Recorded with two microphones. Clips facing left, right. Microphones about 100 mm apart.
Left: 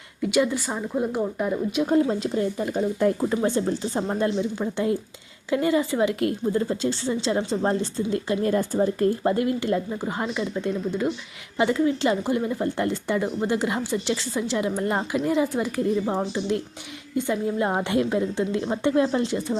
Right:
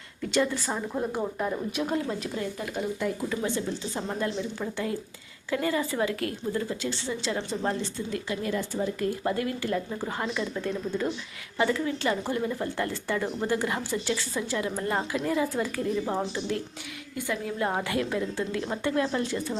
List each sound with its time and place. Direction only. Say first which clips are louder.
0.2 s a woman's voice: left 4 dB; 10° left (ahead or behind)
1.9 s a woman's voice: left 8 dB; 30° left (ahead or behind)